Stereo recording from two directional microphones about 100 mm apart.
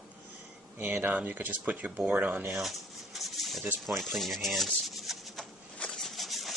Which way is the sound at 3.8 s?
Centre (ahead or behind).